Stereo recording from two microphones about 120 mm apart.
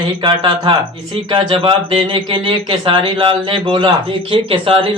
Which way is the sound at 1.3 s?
50° right (ahead or behind).